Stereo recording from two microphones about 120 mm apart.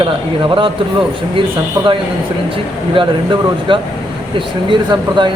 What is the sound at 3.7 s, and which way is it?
Speech, 45° right (ahead or behind).